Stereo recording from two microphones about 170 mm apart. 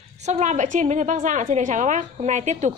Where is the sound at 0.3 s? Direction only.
45° right (ahead or behind).